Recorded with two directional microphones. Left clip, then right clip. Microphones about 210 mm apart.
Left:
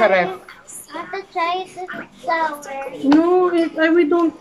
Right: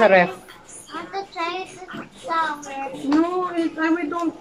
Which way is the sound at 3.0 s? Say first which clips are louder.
Left 7 dB; 50° left (ahead or behind).